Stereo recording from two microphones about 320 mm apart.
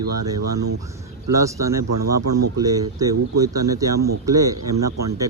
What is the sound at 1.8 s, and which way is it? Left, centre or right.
Speech, right.